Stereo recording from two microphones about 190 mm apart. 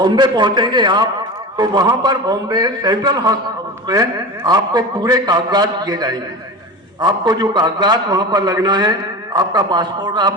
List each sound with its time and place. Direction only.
0.0 s a man's voice: 25° right (ahead or behind)